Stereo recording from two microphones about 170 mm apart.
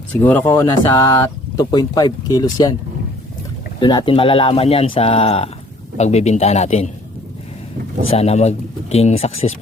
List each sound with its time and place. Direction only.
0.1 s speech: 10° left (ahead or behind)
3.8 s speech: 25° left (ahead or behind)
8.1 s speech: 40° left (ahead or behind)